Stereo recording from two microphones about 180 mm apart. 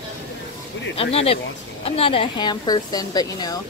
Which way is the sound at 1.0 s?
35° left (ahead or behind).